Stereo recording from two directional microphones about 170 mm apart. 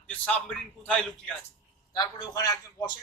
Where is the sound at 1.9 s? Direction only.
20° left (ahead or behind).